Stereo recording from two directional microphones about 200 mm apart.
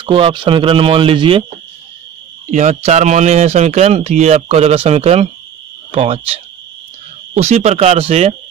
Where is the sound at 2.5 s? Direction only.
35° right (ahead or behind).